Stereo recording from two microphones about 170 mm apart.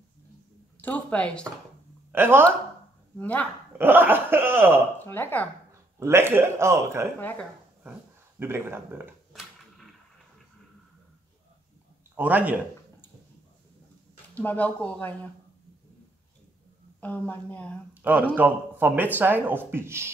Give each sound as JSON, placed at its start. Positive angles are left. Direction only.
{"t": 0.7, "sound": "speech", "side_deg": 10}
{"t": 2.1, "sound": "speech", "side_deg": -15}
{"t": 3.2, "sound": "speech", "side_deg": 10}
{"t": 3.7, "sound": "speech", "side_deg": -10}
{"t": 4.9, "sound": "speech", "side_deg": 10}
{"t": 5.7, "sound": "a man's voice", "side_deg": -15}
{"t": 9.3, "sound": "a sound", "side_deg": 0}
{"t": 12.2, "sound": "speech", "side_deg": -10}
{"t": 14.4, "sound": "speech", "side_deg": 10}
{"t": 17.0, "sound": "speech", "side_deg": 10}
{"t": 18.0, "sound": "speech", "side_deg": -10}